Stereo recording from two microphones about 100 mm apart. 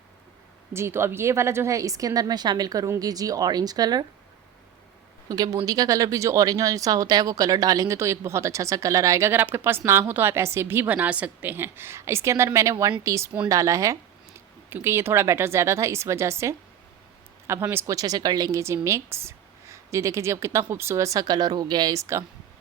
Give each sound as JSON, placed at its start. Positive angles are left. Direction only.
{"t": 0.7, "sound": "speech", "side_deg": -25}
{"t": 5.3, "sound": "speech", "side_deg": -40}
{"t": 17.8, "sound": "speech", "side_deg": -35}